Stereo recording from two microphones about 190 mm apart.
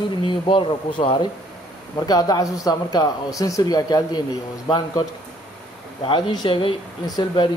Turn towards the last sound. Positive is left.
turn(degrees=20)  # may be behind; listen again after turning